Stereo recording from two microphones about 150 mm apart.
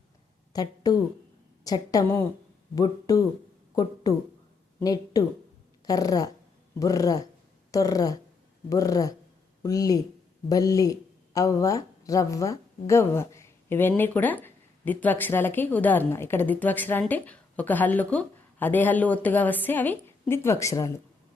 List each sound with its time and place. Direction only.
0.5 s a woman's voice: 25° left (ahead or behind)